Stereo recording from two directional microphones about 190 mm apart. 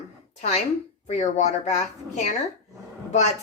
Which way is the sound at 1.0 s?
35° left (ahead or behind).